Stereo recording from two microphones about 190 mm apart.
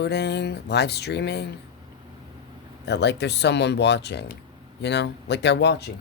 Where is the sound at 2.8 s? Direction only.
60° left (ahead or behind).